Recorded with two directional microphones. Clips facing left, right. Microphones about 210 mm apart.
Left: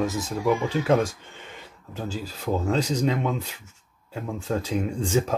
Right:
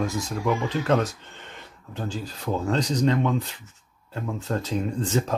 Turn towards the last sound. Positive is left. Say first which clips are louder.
# left 1 dB
turn(degrees=10)  # may be behind; listen again after turning